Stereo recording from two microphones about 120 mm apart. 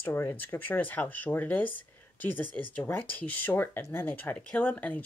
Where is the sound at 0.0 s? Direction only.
20° left (ahead or behind).